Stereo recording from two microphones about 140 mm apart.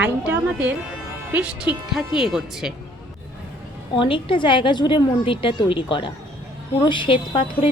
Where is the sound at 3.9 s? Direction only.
35° left (ahead or behind).